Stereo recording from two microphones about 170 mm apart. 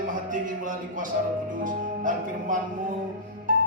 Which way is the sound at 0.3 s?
50° right (ahead or behind).